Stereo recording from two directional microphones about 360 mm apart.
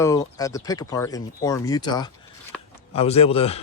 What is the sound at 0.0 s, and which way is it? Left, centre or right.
A man's voice, centre.